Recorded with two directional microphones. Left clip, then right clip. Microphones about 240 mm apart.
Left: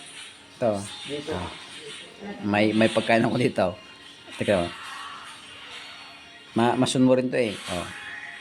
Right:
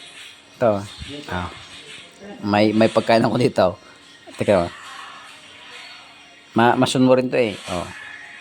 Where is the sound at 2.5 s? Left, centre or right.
Centre.